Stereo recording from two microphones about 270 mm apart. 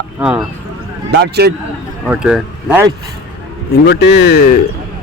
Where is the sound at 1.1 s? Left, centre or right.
Right.